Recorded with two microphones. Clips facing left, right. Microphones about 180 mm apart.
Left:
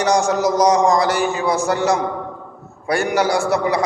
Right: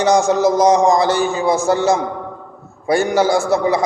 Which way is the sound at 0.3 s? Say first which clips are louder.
Right 3 dB; 25° right (ahead or behind).